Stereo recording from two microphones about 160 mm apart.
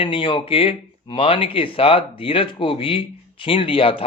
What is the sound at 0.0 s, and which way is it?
Speech, 35° left (ahead or behind).